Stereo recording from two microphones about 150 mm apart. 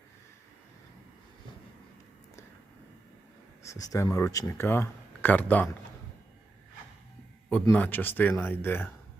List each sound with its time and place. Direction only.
3.6 s speech: 20° left (ahead or behind)
7.7 s speech: 10° left (ahead or behind)